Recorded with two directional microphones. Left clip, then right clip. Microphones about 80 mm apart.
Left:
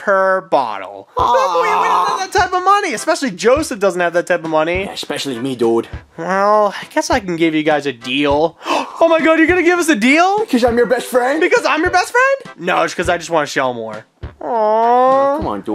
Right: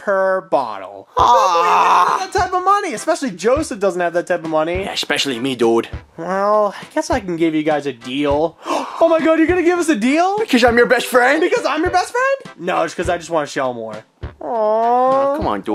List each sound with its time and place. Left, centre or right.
0.0 s speech: left
1.1 s groan: centre
2.3 s speech: left
4.8 s groan: centre
6.2 s speech: left
10.4 s speech: centre
11.4 s speech: left
15.4 s groan: centre